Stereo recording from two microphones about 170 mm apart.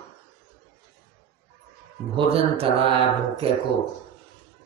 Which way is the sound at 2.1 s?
35° right (ahead or behind).